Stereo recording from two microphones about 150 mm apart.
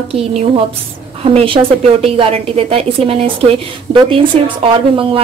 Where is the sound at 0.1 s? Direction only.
50° right (ahead or behind).